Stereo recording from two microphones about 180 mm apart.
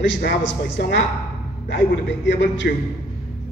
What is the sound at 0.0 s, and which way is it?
A man's voice, 90° left.